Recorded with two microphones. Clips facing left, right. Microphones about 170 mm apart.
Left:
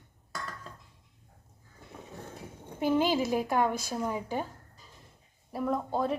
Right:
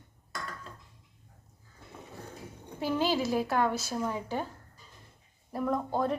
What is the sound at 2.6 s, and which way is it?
A woman's voice, 20° left (ahead or behind).